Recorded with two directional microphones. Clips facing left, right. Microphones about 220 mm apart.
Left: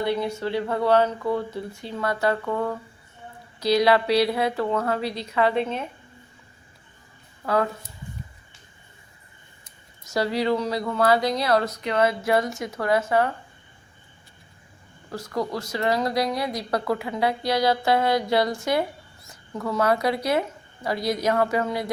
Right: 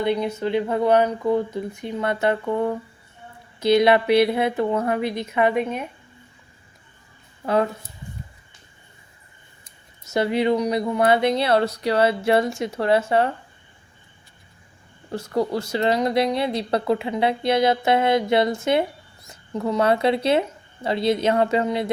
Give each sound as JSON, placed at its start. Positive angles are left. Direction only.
{"t": 0.0, "sound": "speech", "side_deg": -20}
{"t": 7.4, "sound": "speech", "side_deg": -20}
{"t": 10.1, "sound": "speech", "side_deg": -25}
{"t": 15.1, "sound": "speech", "side_deg": -30}